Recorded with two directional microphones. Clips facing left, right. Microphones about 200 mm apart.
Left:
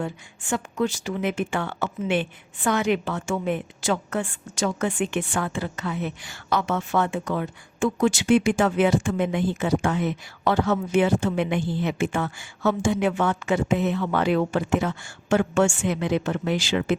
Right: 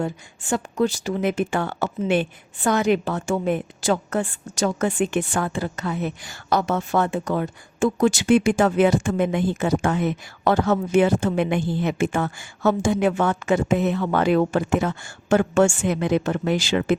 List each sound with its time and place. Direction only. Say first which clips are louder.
0.0 s speech: right 4 dB; 35° right (ahead or behind)